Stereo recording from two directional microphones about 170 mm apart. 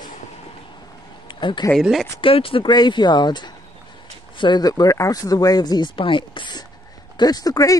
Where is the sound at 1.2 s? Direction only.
25° left (ahead or behind).